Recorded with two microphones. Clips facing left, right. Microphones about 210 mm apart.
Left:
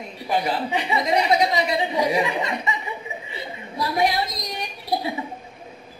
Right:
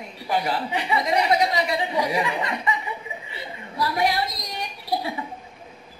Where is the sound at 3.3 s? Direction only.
20° left (ahead or behind).